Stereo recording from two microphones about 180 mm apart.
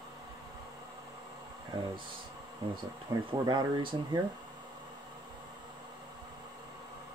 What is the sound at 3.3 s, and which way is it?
Speech, 25° right (ahead or behind).